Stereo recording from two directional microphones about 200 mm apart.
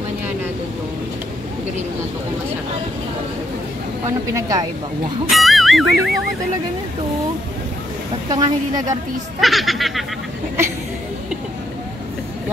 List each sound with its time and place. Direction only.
4.0 s speech: 15° right (ahead or behind)
5.3 s speech: centre (ahead or behind)
8.3 s a woman's voice: 20° right (ahead or behind)
9.4 s speech: centre (ahead or behind)